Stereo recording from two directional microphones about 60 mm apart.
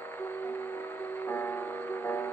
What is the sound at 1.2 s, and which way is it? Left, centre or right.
Music, left.